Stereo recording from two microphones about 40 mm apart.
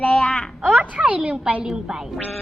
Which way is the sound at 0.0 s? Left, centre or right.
Left.